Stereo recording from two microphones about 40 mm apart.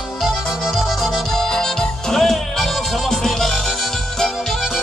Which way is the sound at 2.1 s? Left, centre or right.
Centre.